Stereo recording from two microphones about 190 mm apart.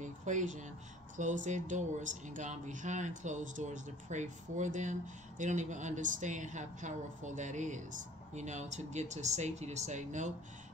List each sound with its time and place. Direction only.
0.0 s speech: 40° right (ahead or behind)